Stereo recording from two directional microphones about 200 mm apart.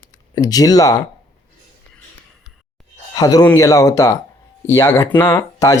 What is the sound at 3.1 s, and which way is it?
A man's voice, 20° left (ahead or behind).